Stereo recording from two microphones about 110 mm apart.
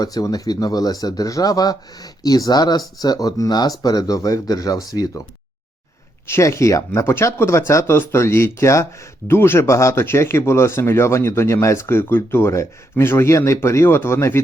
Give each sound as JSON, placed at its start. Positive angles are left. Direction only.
{"t": 0.0, "sound": "speech", "side_deg": 35}
{"t": 6.2, "sound": "speech", "side_deg": 25}